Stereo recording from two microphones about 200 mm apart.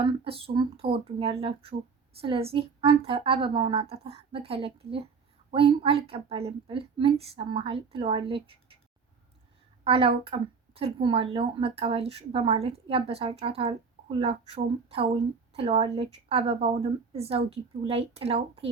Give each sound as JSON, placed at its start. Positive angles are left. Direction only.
{"t": 0.0, "sound": "speech", "side_deg": -30}
{"t": 9.8, "sound": "speech", "side_deg": -30}